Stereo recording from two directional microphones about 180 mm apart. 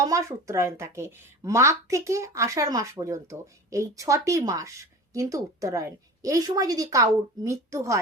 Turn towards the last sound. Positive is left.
turn(degrees=-15)  # may be behind; listen again after turning